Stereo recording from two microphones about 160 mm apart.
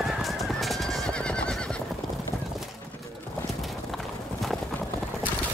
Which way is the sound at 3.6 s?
Centre (ahead or behind).